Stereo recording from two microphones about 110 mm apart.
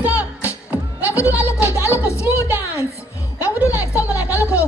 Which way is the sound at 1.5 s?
15° right (ahead or behind).